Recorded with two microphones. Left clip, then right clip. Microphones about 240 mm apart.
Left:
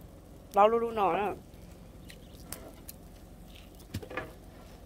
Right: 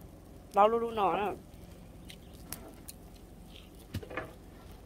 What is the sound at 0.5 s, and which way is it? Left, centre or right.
Speech, centre.